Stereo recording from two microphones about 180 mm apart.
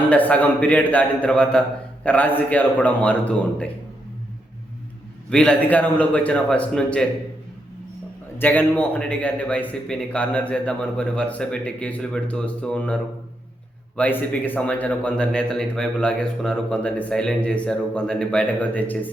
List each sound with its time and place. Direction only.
0.1 s a man's voice: 10° left (ahead or behind)
5.3 s a man's voice: 5° left (ahead or behind)
8.4 s a man's voice: 10° left (ahead or behind)